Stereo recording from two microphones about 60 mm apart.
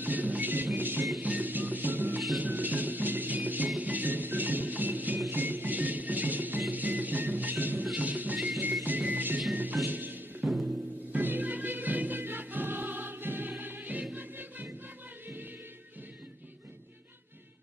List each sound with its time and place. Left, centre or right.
0.0 s music: right
10.4 s timpani: centre
11.1 s music: right